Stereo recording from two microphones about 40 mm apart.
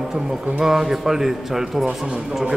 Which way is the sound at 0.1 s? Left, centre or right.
Centre.